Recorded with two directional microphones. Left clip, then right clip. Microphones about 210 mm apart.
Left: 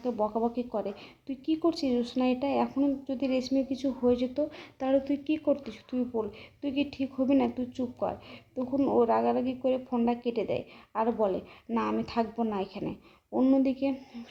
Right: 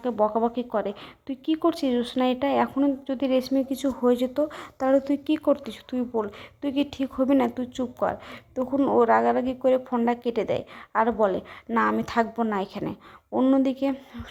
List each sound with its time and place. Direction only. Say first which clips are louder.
0.2 s speech: right 8 dB; 30° right (ahead or behind)
0.4 s a woman's voice: right 5 dB; 10° right (ahead or behind)